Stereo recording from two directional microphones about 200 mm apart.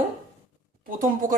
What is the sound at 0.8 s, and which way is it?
Speech, 40° right (ahead or behind).